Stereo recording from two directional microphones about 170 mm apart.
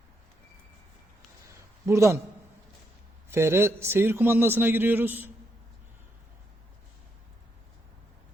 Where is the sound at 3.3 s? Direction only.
15° right (ahead or behind).